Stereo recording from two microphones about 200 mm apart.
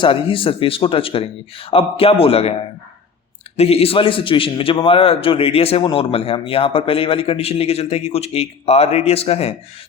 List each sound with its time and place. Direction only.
0.0 s a man's voice: 25° left (ahead or behind)
3.6 s a man's voice: 30° left (ahead or behind)